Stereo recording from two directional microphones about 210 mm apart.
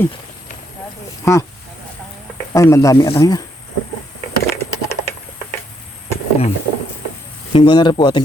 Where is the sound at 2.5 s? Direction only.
15° left (ahead or behind).